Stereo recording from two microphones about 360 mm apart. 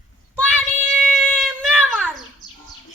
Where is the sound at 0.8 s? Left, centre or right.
Centre.